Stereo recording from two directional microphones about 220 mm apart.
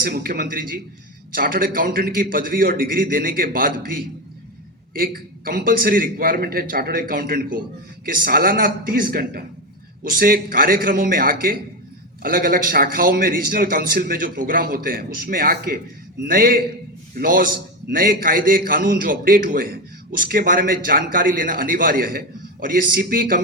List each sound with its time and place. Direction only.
0.0 s a man's voice: 40° right (ahead or behind)